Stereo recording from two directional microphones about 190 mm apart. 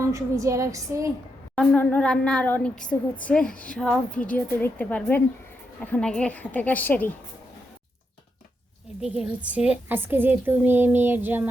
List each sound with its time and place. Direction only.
0.0 s speech: 15° right (ahead or behind)
1.5 s a woman's voice: 10° left (ahead or behind)
9.0 s a woman's voice: 5° right (ahead or behind)